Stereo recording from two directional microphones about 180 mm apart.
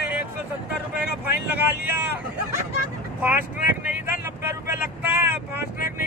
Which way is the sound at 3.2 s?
10° right (ahead or behind).